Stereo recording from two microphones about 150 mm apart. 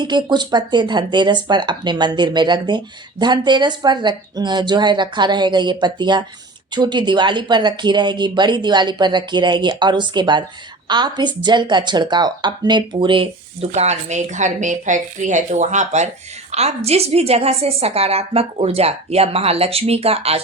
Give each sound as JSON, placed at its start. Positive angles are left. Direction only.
{"t": 0.0, "sound": "a woman's voice", "side_deg": -30}